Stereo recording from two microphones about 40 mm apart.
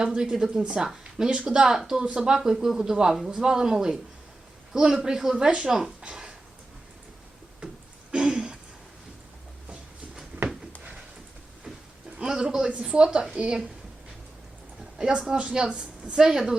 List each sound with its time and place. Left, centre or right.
0.0 s speech: right
0.3 s speech: centre
0.6 s speech: right
8.1 s a sound: centre
12.2 s a man's voice: centre
14.9 s speech: centre